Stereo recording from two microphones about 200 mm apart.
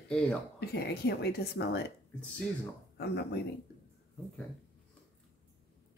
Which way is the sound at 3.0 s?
55° left (ahead or behind).